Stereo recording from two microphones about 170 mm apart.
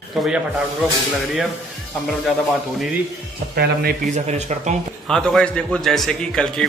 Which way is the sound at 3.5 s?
65° right (ahead or behind).